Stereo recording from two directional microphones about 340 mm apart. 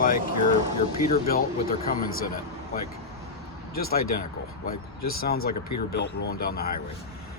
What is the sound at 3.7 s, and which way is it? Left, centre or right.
Speech, left.